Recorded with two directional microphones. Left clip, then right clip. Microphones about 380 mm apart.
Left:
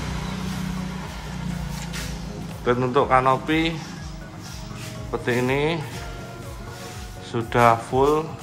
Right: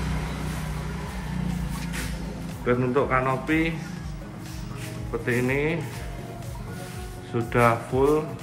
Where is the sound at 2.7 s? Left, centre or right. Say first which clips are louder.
Left 4 dB; centre.